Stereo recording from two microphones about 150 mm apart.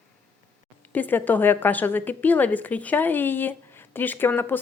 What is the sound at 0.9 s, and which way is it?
A woman's voice, 10° left (ahead or behind).